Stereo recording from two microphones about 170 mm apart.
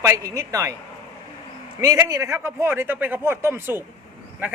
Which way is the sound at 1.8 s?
20° right (ahead or behind).